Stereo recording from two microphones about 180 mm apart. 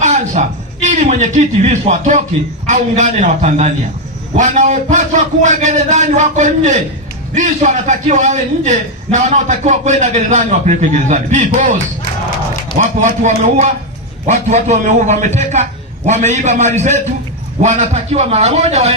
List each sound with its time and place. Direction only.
0.0 s a man's voice: 40° right (ahead or behind)